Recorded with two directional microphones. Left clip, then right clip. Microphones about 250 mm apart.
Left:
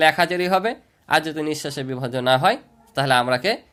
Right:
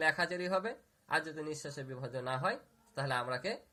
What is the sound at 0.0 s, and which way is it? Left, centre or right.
Speech, left.